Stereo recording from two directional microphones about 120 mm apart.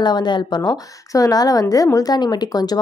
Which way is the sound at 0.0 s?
35° left (ahead or behind).